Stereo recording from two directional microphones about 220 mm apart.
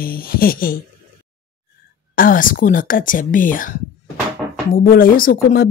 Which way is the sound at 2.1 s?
40° left (ahead or behind).